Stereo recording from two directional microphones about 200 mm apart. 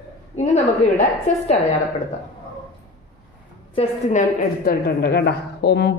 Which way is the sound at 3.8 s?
35° left (ahead or behind).